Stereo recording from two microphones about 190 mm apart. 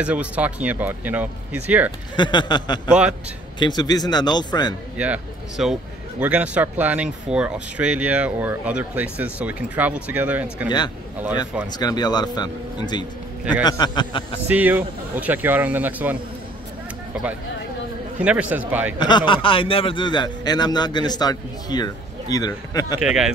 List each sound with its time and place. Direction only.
0.0 s speech: 5° right (ahead or behind)
2.1 s a man's voice: 25° left (ahead or behind)
2.9 s a man's voice: 5° right (ahead or behind)
3.5 s a man's voice: 25° left (ahead or behind)
4.9 s speech: 5° right (ahead or behind)
11.8 s a man's voice: 20° left (ahead or behind)
14.5 s speech: 10° right (ahead or behind)
18.9 s a man's voice: 25° left (ahead or behind)
22.9 s a man's voice: 5° right (ahead or behind)